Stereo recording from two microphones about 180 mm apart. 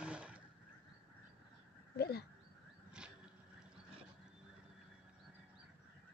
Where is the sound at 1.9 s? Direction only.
60° left (ahead or behind).